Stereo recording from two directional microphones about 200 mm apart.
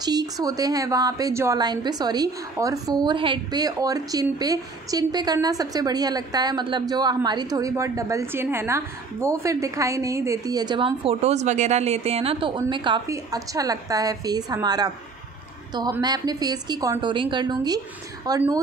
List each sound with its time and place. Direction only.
0.0 s a woman's voice: 20° right (ahead or behind)